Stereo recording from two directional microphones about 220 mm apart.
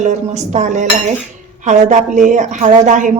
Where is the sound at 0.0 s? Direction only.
30° right (ahead or behind).